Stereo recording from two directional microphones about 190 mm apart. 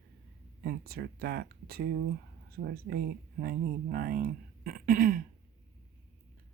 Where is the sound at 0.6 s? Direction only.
55° right (ahead or behind).